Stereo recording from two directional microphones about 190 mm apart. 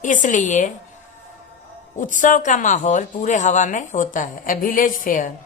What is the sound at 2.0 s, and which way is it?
Speech, 45° left (ahead or behind).